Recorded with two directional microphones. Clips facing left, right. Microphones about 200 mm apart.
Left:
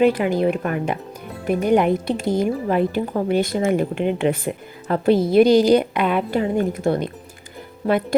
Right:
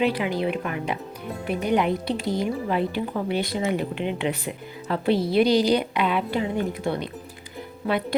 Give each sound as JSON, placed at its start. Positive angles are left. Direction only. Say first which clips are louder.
{"t": 0.0, "sound": "speech", "louder": "left 6 dB", "side_deg": 45}